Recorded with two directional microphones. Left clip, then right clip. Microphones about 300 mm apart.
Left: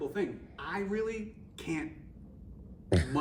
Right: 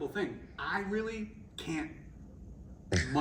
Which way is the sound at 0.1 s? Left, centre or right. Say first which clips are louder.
Left 1 dB; centre.